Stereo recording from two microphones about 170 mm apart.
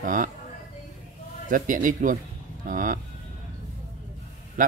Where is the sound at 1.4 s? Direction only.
50° right (ahead or behind).